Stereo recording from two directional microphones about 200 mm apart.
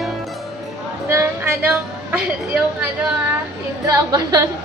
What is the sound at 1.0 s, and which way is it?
A woman's voice, 10° right (ahead or behind).